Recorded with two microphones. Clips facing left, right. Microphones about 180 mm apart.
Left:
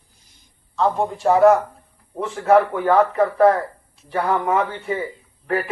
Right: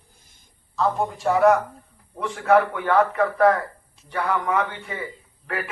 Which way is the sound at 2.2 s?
35° left (ahead or behind).